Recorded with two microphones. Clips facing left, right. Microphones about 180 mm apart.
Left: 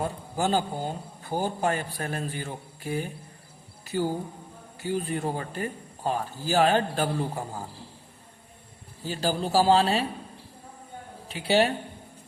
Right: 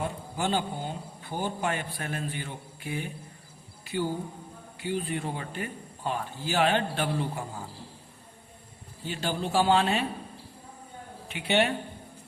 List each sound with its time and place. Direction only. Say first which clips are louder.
0.0 s a man's voice: left 3 dB; 40° left (ahead or behind)
9.0 s a man's voice: left 3 dB; 35° left (ahead or behind)
11.3 s a man's voice: left 3 dB; 35° left (ahead or behind)